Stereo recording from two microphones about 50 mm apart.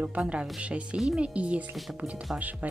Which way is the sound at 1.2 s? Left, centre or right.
Right.